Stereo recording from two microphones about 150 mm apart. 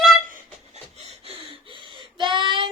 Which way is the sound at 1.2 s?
35° right (ahead or behind).